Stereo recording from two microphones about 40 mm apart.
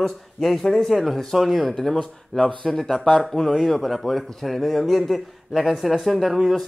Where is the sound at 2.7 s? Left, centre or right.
Centre.